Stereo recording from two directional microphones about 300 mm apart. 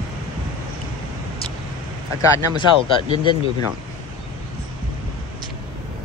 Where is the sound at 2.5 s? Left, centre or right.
Centre.